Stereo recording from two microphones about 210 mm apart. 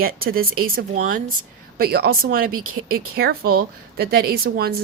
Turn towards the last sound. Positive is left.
turn(degrees=-45)  # may be behind; listen again after turning